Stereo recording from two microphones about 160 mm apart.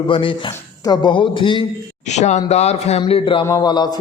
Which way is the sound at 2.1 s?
45° left (ahead or behind).